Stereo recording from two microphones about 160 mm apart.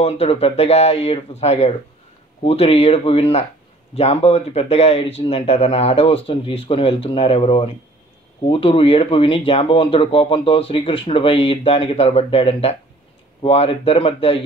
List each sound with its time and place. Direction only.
0.0 s speech: 40° left (ahead or behind)